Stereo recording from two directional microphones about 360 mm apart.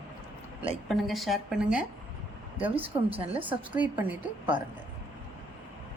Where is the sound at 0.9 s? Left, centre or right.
Centre.